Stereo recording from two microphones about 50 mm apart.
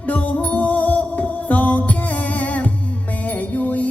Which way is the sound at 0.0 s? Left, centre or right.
Left.